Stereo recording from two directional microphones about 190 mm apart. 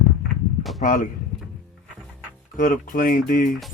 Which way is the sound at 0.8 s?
45° left (ahead or behind).